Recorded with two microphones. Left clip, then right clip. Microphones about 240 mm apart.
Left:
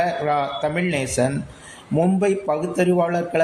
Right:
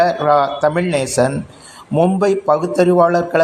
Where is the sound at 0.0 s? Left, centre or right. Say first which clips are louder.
Right 8 dB; centre.